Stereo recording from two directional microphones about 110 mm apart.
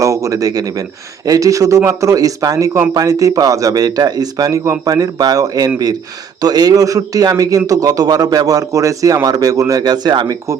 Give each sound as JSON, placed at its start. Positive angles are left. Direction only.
{"t": 0.0, "sound": "a man's voice", "side_deg": -30}